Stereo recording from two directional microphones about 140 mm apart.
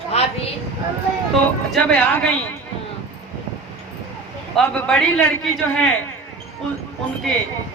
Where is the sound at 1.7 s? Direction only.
5° left (ahead or behind).